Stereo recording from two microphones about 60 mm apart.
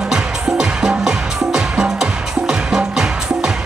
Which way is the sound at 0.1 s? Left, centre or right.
Centre.